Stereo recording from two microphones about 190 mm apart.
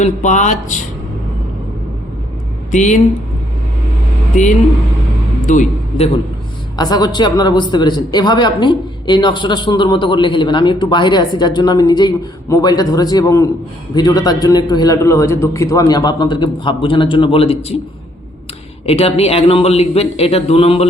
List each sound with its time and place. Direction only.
0.0 s a man's voice: 40° left (ahead or behind)
2.7 s a man's voice: 40° left (ahead or behind)
5.5 s a man's voice: 40° left (ahead or behind)
6.7 s a man's voice: 20° left (ahead or behind)
18.9 s a man's voice: 30° left (ahead or behind)